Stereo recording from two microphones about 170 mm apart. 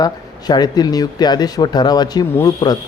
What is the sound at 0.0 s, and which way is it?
Speech, 25° left (ahead or behind).